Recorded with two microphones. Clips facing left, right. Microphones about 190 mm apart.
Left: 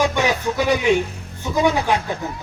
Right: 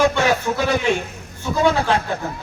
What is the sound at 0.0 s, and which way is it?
A man's voice, 15° left (ahead or behind).